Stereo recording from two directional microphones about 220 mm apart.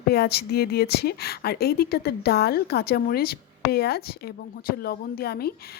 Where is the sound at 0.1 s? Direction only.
45° left (ahead or behind).